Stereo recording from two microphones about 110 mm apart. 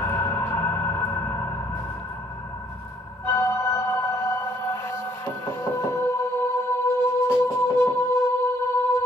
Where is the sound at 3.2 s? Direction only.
25° left (ahead or behind).